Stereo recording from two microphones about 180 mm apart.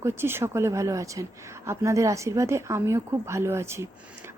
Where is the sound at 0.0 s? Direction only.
15° right (ahead or behind).